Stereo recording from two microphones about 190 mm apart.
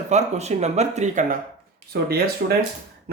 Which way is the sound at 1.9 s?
55° right (ahead or behind).